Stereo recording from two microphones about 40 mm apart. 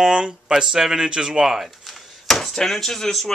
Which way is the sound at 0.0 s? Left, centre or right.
Centre.